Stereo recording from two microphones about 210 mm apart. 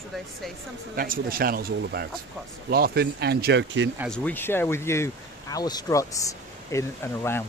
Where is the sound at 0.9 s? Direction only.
45° right (ahead or behind); by 3.8 s 60° right (ahead or behind).